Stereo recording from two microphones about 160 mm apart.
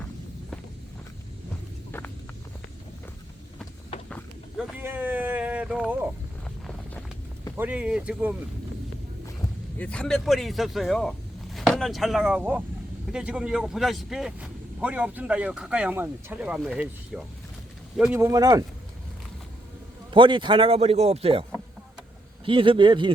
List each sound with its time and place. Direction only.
4.8 s a sound: 10° right (ahead or behind)
7.5 s speech: 10° right (ahead or behind)
9.7 s speech: 5° left (ahead or behind); by 16.8 s 10° right (ahead or behind)
17.9 s speech: 5° right (ahead or behind)
18.2 s speech: 20° right (ahead or behind)
20.1 s a man's voice: 30° right (ahead or behind)
22.4 s a man's voice: 35° right (ahead or behind)